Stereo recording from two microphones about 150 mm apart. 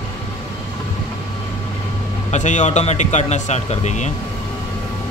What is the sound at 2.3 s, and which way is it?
Speech, 50° left (ahead or behind).